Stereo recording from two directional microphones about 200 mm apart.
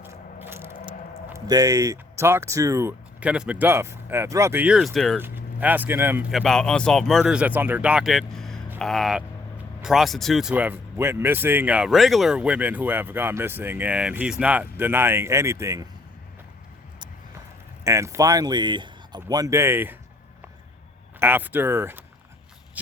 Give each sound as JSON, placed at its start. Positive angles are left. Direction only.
{"t": 0.0, "sound": "a sound", "side_deg": -10}
{"t": 1.3, "sound": "speech", "side_deg": -20}
{"t": 5.2, "sound": "speech", "side_deg": -10}
{"t": 6.4, "sound": "speech", "side_deg": 0}
{"t": 17.8, "sound": "speech", "side_deg": -15}
{"t": 21.2, "sound": "speech", "side_deg": -10}